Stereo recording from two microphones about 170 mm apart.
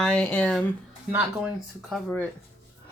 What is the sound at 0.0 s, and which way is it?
Speech, 5° left (ahead or behind).